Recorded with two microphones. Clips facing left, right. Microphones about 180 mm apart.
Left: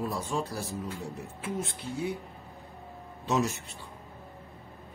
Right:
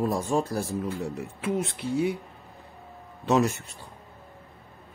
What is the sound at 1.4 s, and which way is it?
Speech, 75° right (ahead or behind).